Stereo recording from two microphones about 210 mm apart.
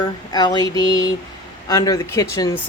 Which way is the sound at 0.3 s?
20° left (ahead or behind).